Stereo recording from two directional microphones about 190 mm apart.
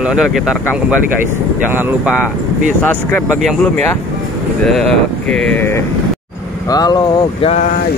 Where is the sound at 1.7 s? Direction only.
10° right (ahead or behind).